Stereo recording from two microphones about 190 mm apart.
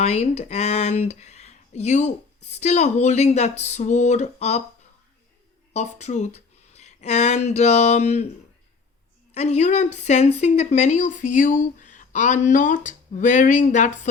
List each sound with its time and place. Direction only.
0.0 s speech: 35° left (ahead or behind)
5.7 s speech: 35° left (ahead or behind)
9.3 s speech: 35° left (ahead or behind)